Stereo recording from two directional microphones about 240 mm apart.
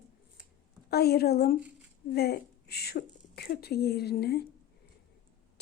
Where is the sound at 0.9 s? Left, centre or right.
Left.